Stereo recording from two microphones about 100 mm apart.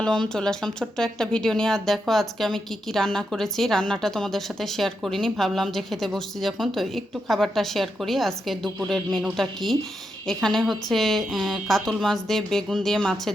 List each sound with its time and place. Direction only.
0.0 s speech: 10° left (ahead or behind)